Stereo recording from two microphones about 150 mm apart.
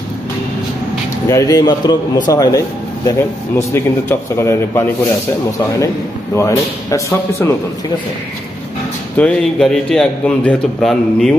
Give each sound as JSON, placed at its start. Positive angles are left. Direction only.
{"t": 1.2, "sound": "a man's voice", "side_deg": 20}
{"t": 6.3, "sound": "a man's voice", "side_deg": 20}
{"t": 9.1, "sound": "a man's voice", "side_deg": 5}